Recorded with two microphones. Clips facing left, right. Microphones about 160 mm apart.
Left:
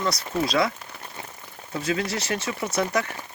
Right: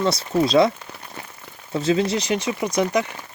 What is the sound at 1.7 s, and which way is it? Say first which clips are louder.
Speech: right 7 dB; 25° right (ahead or behind).